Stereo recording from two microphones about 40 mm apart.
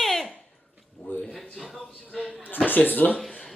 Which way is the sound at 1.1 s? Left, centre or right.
Left.